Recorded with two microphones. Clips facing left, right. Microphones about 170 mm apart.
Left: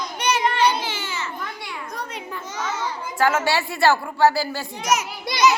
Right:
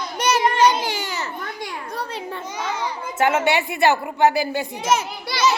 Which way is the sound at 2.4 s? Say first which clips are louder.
Even; 15° right (ahead or behind).